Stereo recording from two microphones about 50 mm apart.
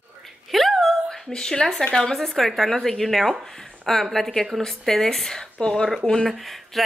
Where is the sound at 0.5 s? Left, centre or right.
Centre.